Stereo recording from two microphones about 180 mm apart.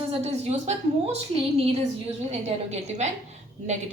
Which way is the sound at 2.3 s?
35° right (ahead or behind).